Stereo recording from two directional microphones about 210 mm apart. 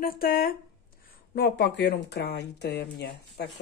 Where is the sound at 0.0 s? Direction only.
45° left (ahead or behind).